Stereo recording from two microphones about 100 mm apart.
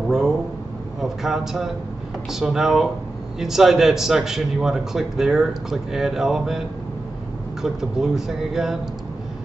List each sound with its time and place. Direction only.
1.0 s a man's voice: 5° right (ahead or behind)
7.6 s a man's voice: 5° right (ahead or behind)